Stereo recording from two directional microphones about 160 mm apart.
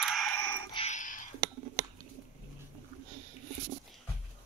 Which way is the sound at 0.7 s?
45° left (ahead or behind).